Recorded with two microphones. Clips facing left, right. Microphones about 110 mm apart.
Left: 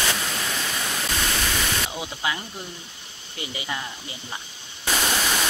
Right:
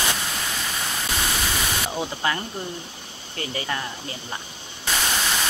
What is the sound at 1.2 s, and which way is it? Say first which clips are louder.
Static: even; 5° right (ahead or behind).